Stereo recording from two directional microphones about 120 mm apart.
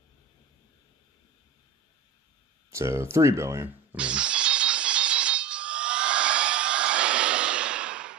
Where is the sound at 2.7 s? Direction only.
25° right (ahead or behind).